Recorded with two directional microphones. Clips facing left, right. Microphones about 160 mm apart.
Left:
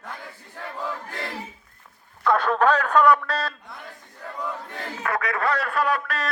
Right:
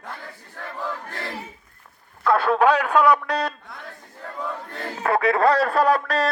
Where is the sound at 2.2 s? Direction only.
5° right (ahead or behind).